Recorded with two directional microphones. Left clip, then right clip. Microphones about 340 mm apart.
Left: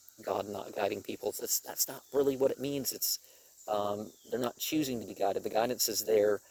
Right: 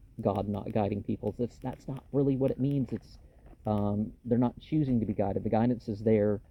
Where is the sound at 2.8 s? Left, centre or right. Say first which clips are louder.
Left 5 dB; left.